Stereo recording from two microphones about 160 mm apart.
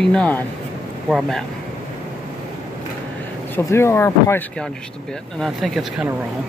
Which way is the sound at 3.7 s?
15° left (ahead or behind).